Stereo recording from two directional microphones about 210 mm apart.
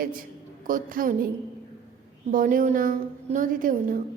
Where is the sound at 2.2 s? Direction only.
40° right (ahead or behind).